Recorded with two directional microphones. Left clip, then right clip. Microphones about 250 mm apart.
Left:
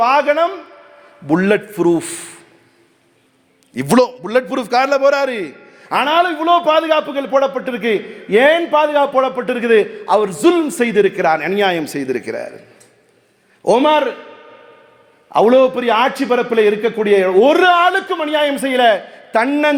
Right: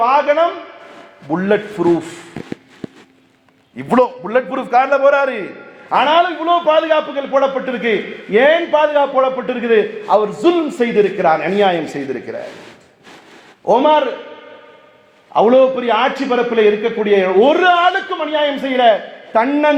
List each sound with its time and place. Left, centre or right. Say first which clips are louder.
0.0 s a sound: even; left
1.3 s a man's voice: left 1 dB; left
3.8 s a man's voice: even; left
5.9 s a man's voice: right 2 dB; left
13.7 s a man's voice: right 1 dB; left
15.3 s a man's voice: even; left